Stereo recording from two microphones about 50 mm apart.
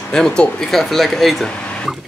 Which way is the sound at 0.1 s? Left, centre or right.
Centre.